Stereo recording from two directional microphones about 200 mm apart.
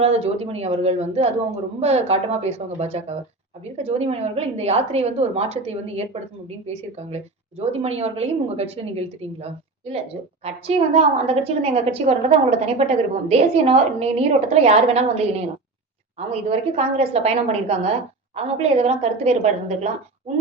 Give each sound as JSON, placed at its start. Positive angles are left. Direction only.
{"t": 0.0, "sound": "a woman's voice", "side_deg": -30}